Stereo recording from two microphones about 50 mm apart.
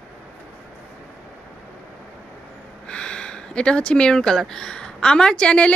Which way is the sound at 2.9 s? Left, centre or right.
Centre.